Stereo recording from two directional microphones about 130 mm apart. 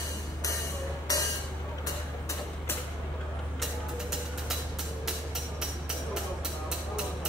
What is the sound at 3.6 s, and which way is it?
Music, centre (ahead or behind).